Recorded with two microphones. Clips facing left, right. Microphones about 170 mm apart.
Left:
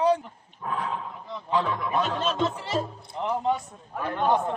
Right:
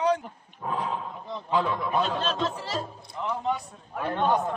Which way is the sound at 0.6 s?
25° right (ahead or behind).